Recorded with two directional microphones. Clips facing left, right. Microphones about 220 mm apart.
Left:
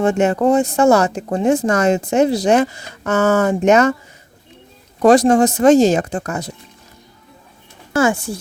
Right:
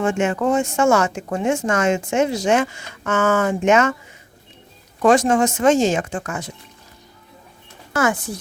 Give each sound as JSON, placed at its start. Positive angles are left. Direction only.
{"t": 0.0, "sound": "speech", "side_deg": 40}
{"t": 5.0, "sound": "speech", "side_deg": 35}
{"t": 7.9, "sound": "speech", "side_deg": 30}